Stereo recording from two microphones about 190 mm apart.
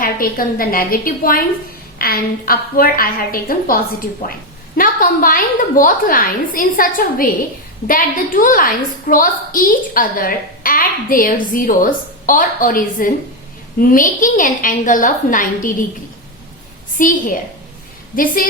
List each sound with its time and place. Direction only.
0.0 s a woman's voice: 50° left (ahead or behind)
4.8 s a woman's voice: 45° left (ahead or behind)
17.0 s a woman's voice: 45° left (ahead or behind)